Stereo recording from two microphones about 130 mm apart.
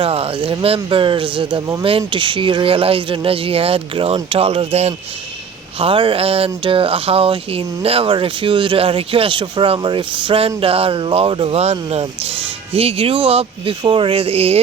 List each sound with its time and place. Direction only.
0.0 s speech: 45° right (ahead or behind)
5.8 s speech: 40° right (ahead or behind)